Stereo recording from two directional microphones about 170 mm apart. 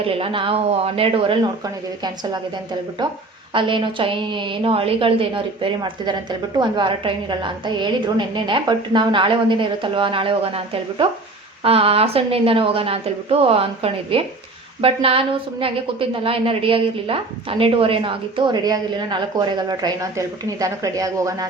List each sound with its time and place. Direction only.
0.0 s a woman's voice: 35° right (ahead or behind)
3.5 s a woman's voice: 30° right (ahead or behind)